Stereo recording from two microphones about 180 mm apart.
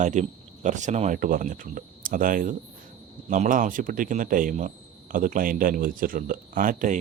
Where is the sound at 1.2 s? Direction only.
50° right (ahead or behind).